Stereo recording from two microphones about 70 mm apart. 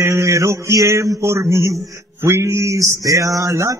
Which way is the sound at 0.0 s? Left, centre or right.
Right.